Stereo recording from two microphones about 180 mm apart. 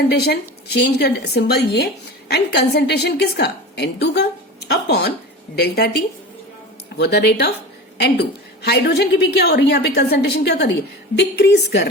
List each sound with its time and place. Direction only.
0.1 s a woman's voice: 65° left (ahead or behind)